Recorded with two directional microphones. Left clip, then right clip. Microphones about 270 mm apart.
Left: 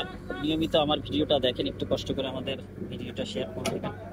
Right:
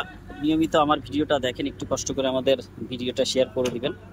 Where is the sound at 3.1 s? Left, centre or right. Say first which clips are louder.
Right 11 dB; right.